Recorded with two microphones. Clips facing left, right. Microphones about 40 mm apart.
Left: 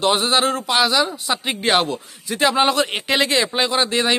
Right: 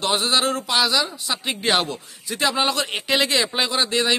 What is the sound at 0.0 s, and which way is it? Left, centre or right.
Speech, centre.